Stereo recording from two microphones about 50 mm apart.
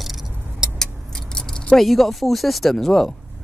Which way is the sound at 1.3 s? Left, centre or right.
Centre.